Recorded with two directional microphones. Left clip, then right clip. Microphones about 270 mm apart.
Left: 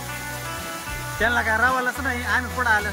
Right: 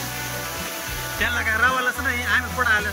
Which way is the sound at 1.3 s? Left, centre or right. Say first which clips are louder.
Left 1 dB; left.